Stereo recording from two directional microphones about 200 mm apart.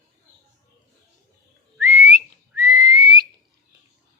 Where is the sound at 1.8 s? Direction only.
15° right (ahead or behind).